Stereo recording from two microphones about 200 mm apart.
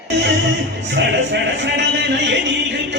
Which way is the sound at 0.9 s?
60° right (ahead or behind).